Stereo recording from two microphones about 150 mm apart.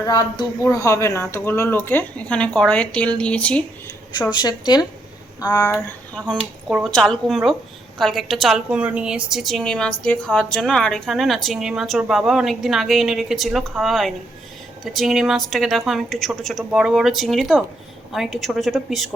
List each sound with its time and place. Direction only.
0.0 s speech: 25° left (ahead or behind); by 3.6 s 10° left (ahead or behind)
4.2 s a woman's voice: 30° left (ahead or behind)
5.7 s a woman's voice: 5° left (ahead or behind)